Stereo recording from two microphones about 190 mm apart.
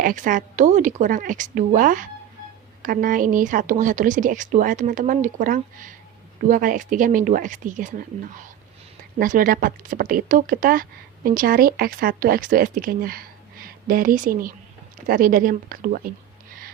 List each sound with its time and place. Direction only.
0.0 s speech: 45° right (ahead or behind)